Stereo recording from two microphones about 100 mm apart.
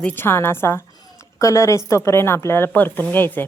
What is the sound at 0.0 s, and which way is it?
Speech, 20° left (ahead or behind).